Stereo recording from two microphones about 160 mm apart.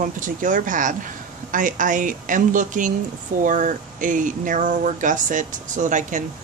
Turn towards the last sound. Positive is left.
turn(degrees=-50)  # may be behind; listen again after turning